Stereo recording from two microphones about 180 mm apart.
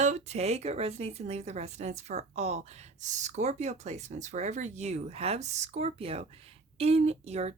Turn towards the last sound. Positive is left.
turn(degrees=-35)  # may be behind; listen again after turning